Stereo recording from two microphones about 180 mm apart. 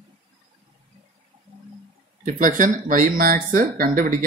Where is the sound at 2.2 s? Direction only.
45° right (ahead or behind).